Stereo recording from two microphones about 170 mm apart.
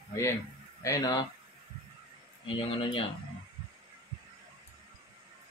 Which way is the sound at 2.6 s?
30° left (ahead or behind).